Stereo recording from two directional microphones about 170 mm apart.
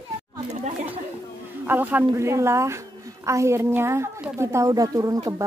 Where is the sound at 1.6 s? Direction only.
10° right (ahead or behind).